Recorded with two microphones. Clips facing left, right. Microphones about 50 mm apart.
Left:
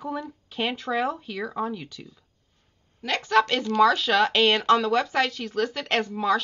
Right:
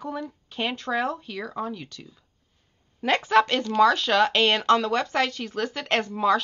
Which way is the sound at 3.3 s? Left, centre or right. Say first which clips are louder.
Left 1 dB; centre.